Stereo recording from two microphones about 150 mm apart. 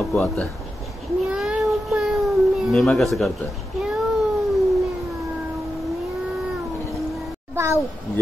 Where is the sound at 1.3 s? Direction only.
5° right (ahead or behind).